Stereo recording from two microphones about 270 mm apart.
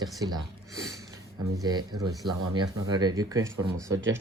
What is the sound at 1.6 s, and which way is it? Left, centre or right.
Speech, centre.